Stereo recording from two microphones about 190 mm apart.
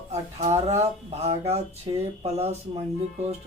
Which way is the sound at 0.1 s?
35° right (ahead or behind).